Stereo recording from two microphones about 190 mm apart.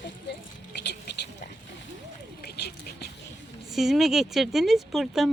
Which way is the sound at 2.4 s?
60° left (ahead or behind).